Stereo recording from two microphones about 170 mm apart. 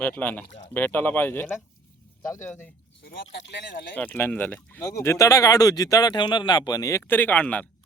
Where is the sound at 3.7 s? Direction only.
60° left (ahead or behind).